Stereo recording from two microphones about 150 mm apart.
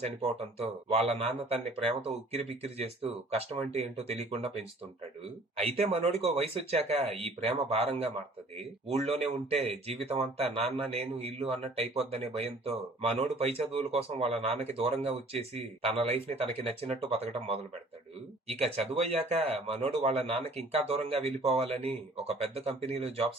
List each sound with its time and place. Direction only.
0.0 s speech: 45° right (ahead or behind)
5.7 s a man's voice: 45° right (ahead or behind)
18.9 s a man's voice: 45° right (ahead or behind)